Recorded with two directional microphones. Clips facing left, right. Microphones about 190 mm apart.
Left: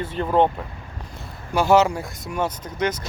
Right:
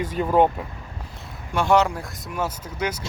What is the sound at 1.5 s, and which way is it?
Speech, centre (ahead or behind).